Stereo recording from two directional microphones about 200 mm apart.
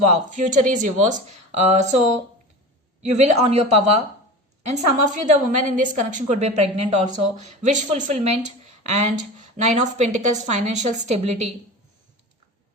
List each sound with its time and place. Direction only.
0.0 s speech: 35° right (ahead or behind)
3.0 s speech: 35° right (ahead or behind)